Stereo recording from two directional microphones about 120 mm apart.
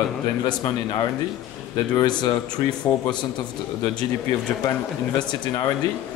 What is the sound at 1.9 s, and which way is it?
Speech, 35° left (ahead or behind).